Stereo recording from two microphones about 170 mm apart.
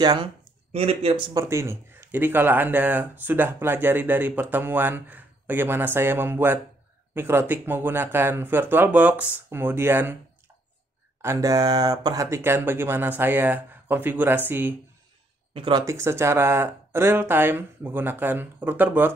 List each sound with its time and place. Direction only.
0.0 s speech: 25° right (ahead or behind)
0.7 s speech: 35° right (ahead or behind)
1.5 s speech: 15° right (ahead or behind)
11.1 s speech: 15° right (ahead or behind)
15.5 s speech: 30° right (ahead or behind)
15.8 s speech: 15° right (ahead or behind)